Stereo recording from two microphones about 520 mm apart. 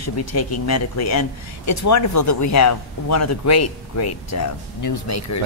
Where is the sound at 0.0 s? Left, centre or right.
Left.